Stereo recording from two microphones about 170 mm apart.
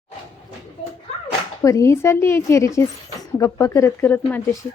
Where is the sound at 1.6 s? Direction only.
15° left (ahead or behind).